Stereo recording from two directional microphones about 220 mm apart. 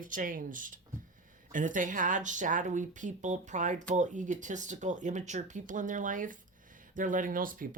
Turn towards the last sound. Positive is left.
turn(degrees=-40)  # may be behind; listen again after turning